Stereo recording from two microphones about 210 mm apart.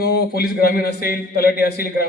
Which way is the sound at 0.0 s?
50° left (ahead or behind).